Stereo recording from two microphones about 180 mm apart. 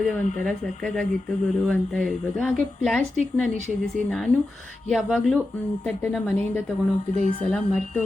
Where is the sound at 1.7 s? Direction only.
5° left (ahead or behind).